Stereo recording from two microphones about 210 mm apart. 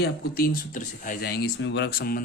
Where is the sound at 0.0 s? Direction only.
45° left (ahead or behind).